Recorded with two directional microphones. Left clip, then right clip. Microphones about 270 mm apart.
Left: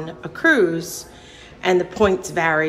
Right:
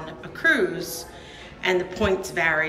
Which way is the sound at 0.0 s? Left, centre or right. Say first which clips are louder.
Left 4 dB; centre.